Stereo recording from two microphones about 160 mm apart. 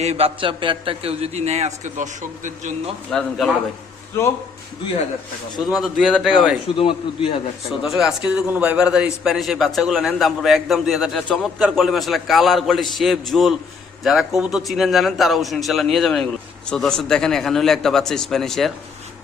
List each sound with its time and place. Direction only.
0.0 s a man's voice: 40° right (ahead or behind)
3.1 s a man's voice: centre (ahead or behind)
5.6 s a man's voice: centre (ahead or behind)
6.7 s a man's voice: 35° left (ahead or behind)
7.7 s a man's voice: 5° right (ahead or behind)